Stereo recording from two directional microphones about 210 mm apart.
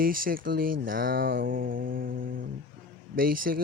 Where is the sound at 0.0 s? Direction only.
40° right (ahead or behind).